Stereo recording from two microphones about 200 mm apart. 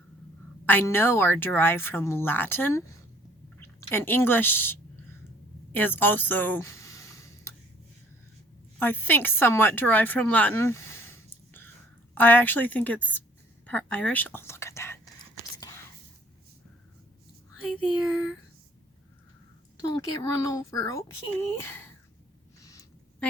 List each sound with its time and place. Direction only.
0.6 s a woman's voice: 10° left (ahead or behind)
5.7 s a sound: 10° left (ahead or behind)
8.8 s a woman's voice: 10° left (ahead or behind)
17.6 s speech: centre (ahead or behind)
20.0 s a woman's voice: 15° left (ahead or behind)
22.6 s a sound: 15° left (ahead or behind)